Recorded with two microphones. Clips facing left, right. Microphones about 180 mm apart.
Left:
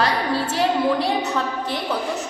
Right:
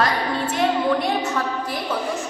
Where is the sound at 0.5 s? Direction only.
35° left (ahead or behind).